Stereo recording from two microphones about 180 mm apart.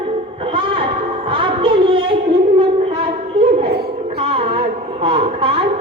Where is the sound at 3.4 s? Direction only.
35° right (ahead or behind).